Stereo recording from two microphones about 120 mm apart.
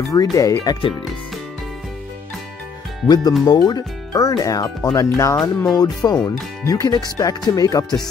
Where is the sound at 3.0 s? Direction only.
35° left (ahead or behind).